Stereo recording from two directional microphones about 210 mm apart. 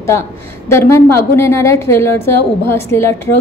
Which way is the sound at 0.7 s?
15° left (ahead or behind).